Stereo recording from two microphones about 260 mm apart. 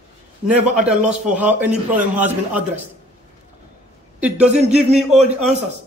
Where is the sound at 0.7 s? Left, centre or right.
Centre.